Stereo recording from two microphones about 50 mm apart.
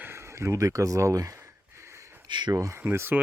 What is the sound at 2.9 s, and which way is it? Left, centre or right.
Speech, right.